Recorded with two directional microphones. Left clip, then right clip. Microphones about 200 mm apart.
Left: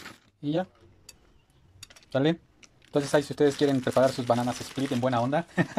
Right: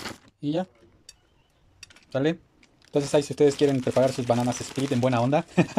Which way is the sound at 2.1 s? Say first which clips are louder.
Even; centre (ahead or behind).